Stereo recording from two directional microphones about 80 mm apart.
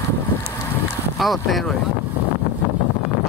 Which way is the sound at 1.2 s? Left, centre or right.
Centre.